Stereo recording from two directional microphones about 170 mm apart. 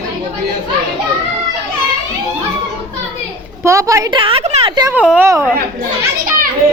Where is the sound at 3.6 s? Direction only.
20° right (ahead or behind); by 4.7 s 40° right (ahead or behind).